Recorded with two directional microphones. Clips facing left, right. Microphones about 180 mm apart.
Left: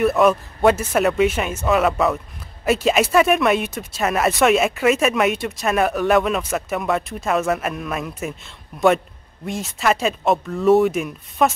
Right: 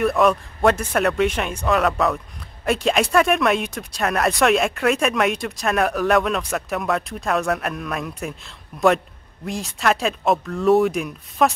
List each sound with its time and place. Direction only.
0.0 s speech: centre (ahead or behind)